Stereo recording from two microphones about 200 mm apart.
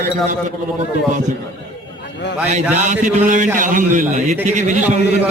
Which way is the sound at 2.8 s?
40° right (ahead or behind).